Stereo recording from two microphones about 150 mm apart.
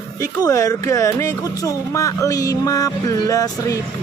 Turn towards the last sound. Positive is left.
turn(degrees=20)  # may be behind; listen again after turning